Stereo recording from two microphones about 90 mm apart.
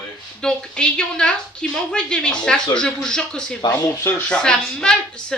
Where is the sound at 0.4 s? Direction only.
10° left (ahead or behind).